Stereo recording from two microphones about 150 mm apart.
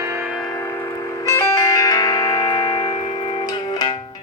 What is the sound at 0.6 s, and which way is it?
Music, 15° left (ahead or behind).